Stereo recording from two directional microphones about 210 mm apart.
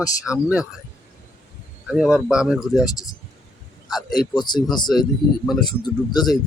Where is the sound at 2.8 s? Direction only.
15° left (ahead or behind).